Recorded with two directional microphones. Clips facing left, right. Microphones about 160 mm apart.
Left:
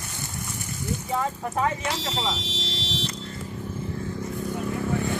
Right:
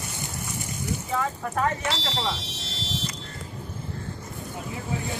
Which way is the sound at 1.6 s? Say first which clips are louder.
Even; 15° left (ahead or behind).